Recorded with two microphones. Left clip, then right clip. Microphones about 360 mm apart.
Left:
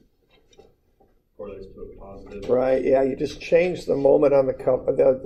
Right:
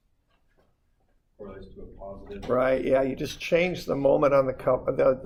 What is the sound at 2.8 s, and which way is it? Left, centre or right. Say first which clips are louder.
Speech: left 4 dB; right.